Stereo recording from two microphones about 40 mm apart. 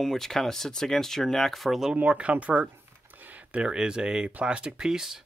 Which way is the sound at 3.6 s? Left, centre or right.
Right.